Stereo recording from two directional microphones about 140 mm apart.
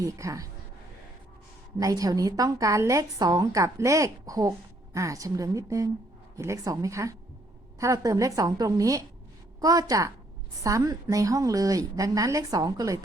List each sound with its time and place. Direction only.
0.0 s a woman's voice: 25° right (ahead or behind)
1.8 s a woman's voice: 25° right (ahead or behind)